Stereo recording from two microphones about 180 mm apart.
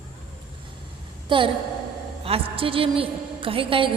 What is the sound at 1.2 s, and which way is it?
A woman's voice, 30° right (ahead or behind).